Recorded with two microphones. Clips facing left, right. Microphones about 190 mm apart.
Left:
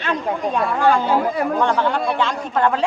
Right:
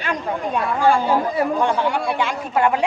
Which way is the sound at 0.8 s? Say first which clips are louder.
Even; 10° right (ahead or behind).